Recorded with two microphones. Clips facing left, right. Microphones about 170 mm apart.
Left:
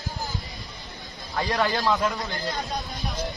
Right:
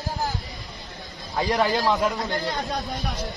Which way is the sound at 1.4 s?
20° right (ahead or behind).